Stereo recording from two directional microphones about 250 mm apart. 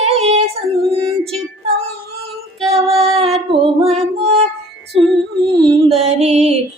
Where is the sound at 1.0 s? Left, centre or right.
Centre.